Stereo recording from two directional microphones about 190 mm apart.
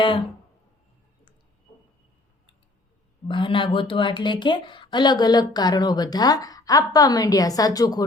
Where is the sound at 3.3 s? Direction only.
25° left (ahead or behind).